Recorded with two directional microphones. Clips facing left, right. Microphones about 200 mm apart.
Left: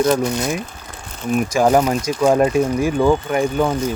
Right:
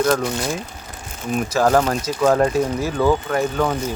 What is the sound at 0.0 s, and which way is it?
Speech, 15° left (ahead or behind).